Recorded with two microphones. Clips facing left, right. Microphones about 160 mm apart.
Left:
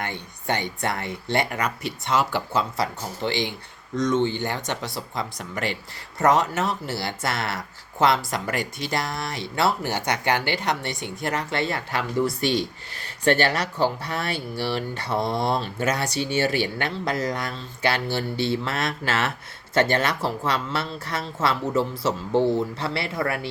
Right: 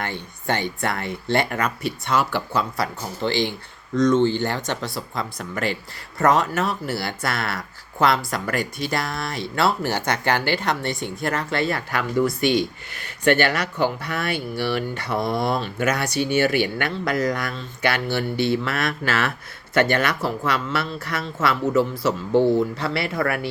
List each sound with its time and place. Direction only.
0.0 s speech: 15° left (ahead or behind)